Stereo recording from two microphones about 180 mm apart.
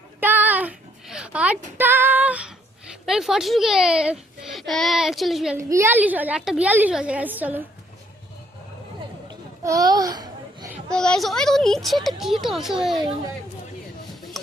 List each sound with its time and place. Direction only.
0.2 s child singing: 10° right (ahead or behind)
3.1 s a child's voice: centre (ahead or behind)
5.5 s a woman's voice: 15° right (ahead or behind)
9.6 s a sound: 20° right (ahead or behind)
10.9 s a child's voice: 5° left (ahead or behind)